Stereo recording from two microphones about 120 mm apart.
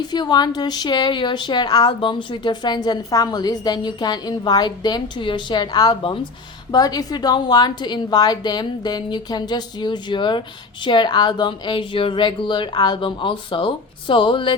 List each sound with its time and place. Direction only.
0.0 s speech: 35° left (ahead or behind)